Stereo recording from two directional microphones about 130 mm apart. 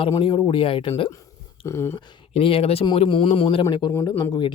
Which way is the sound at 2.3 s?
50° left (ahead or behind).